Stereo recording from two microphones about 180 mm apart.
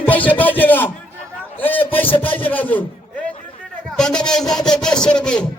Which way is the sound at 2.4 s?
10° left (ahead or behind).